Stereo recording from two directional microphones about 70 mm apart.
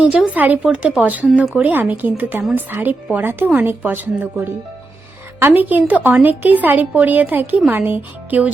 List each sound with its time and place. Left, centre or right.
0.3 s a woman's voice: right
0.6 s a woman's voice: centre